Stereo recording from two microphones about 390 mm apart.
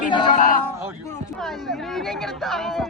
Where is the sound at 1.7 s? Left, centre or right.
Centre.